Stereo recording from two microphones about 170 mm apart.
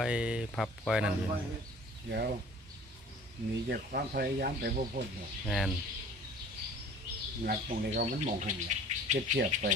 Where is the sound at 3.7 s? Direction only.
65° right (ahead or behind).